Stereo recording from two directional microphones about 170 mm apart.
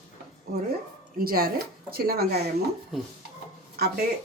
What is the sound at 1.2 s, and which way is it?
Speech, 60° right (ahead or behind).